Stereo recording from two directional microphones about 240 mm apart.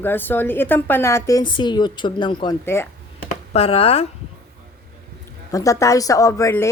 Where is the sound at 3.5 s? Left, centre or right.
Left.